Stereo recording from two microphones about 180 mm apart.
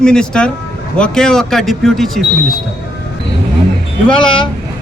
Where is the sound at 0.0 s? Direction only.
5° left (ahead or behind).